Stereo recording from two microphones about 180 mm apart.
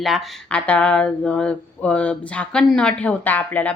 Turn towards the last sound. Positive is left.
turn(degrees=10)  # may be behind; listen again after turning